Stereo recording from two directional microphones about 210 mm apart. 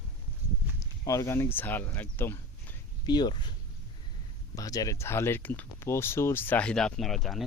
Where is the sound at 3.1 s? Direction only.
20° left (ahead or behind).